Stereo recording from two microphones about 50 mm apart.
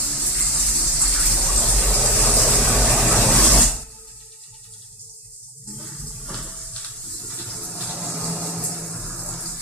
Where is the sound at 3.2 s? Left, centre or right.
Centre.